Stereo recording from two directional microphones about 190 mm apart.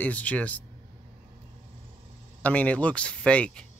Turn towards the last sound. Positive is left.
turn(degrees=5)  # may be behind; listen again after turning